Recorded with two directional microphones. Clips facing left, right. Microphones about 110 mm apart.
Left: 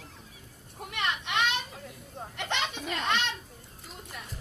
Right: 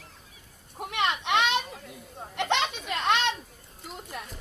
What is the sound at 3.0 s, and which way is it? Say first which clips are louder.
Children playing: right 6 dB; 65° right (ahead or behind).